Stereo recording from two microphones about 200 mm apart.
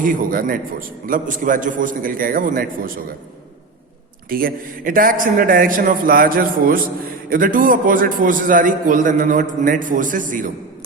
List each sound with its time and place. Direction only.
0.0 s a man's voice: 45° right (ahead or behind)
4.3 s a man's voice: 45° right (ahead or behind)